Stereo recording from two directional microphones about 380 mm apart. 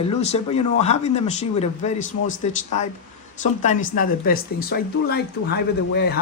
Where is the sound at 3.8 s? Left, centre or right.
Left.